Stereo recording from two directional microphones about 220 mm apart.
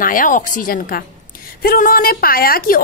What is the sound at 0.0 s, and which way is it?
A woman's voice, 35° left (ahead or behind).